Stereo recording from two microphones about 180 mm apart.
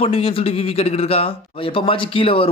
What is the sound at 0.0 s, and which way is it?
Speech, 30° left (ahead or behind).